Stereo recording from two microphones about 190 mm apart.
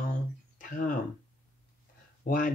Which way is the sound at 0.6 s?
45° left (ahead or behind).